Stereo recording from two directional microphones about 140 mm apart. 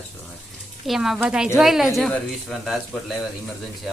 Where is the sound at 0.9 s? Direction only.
Centre (ahead or behind).